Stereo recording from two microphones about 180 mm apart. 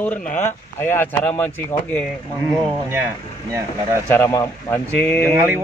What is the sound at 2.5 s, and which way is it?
Speech, 15° right (ahead or behind).